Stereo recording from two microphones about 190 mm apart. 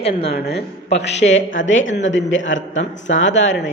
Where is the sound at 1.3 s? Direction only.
75° left (ahead or behind).